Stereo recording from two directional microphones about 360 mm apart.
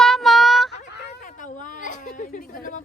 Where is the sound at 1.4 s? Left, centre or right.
Left.